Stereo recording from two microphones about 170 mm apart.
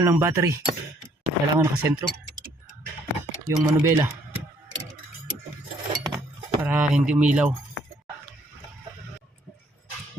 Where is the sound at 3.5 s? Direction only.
15° right (ahead or behind).